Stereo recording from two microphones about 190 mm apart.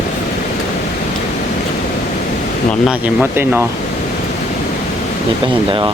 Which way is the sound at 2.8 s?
5° right (ahead or behind).